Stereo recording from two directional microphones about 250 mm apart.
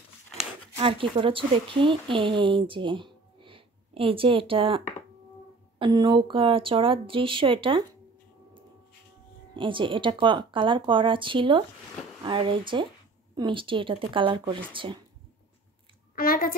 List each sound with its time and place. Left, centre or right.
0.7 s speech: right
9.6 s speech: centre
16.2 s a woman's voice: left